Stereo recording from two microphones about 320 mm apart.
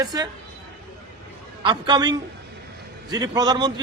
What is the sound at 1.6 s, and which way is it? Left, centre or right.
A man's voice, centre.